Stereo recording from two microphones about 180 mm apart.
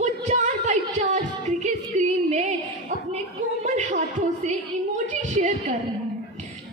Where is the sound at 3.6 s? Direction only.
40° right (ahead or behind).